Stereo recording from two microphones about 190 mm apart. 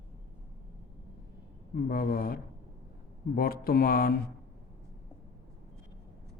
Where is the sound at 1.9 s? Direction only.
50° left (ahead or behind).